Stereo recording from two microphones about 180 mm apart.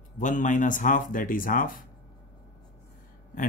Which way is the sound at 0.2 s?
45° left (ahead or behind).